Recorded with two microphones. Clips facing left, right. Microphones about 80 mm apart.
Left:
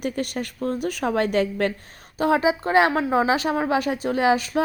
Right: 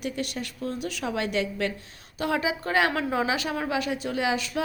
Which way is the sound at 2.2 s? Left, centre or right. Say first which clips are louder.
Left 7 dB; left.